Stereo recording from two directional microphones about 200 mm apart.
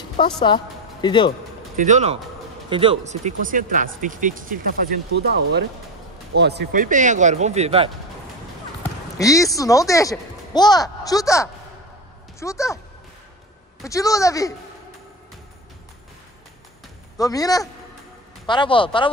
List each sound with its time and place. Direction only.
0.5 s speech: 25° left (ahead or behind)
1.8 s speech: 35° right (ahead or behind)
5.2 s speech: 55° right (ahead or behind); by 7.9 s 30° right (ahead or behind)
9.2 s speech: 15° left (ahead or behind)
13.8 s speech: 15° left (ahead or behind)
17.2 s speech: 15° left (ahead or behind)